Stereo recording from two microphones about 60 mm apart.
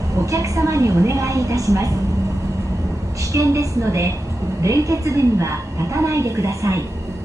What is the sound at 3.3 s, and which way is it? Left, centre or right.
A woman's voice, right.